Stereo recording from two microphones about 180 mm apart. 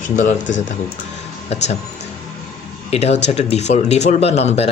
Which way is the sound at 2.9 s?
35° left (ahead or behind).